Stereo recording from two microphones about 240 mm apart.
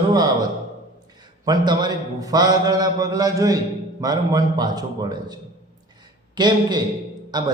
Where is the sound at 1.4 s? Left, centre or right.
Centre.